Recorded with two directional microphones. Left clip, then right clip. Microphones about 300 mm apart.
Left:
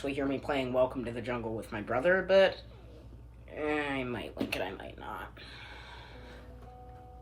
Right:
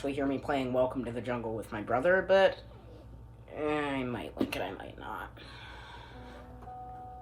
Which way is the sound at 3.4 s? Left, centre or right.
Centre.